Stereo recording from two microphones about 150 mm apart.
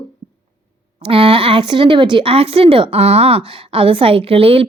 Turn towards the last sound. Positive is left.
turn(degrees=-40)  # may be behind; listen again after turning